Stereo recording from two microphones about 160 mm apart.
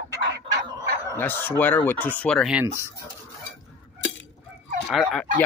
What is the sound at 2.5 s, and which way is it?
Speech, 10° right (ahead or behind).